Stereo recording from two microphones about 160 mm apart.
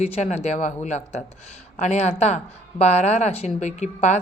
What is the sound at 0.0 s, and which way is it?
A woman's voice, 45° left (ahead or behind).